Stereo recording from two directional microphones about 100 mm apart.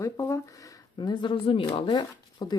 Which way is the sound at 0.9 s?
50° left (ahead or behind).